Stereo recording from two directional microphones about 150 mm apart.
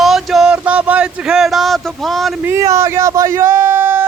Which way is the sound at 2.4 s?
20° right (ahead or behind).